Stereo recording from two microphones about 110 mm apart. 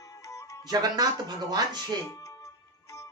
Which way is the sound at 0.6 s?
35° right (ahead or behind).